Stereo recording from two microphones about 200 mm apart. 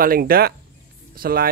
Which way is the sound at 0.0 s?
45° right (ahead or behind).